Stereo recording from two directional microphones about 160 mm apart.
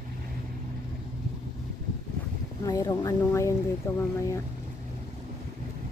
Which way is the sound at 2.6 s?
20° left (ahead or behind).